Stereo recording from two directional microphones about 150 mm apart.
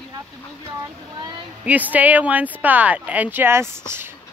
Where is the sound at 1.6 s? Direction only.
10° right (ahead or behind).